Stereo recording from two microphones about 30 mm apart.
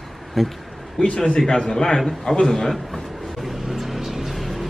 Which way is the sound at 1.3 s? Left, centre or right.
Left.